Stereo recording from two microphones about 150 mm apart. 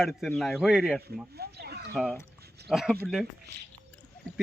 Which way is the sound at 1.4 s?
90° right.